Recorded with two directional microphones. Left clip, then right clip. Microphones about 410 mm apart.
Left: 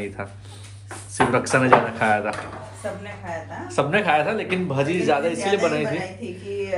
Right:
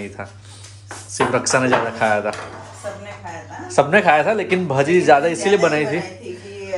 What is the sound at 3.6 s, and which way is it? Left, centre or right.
A man's voice, centre.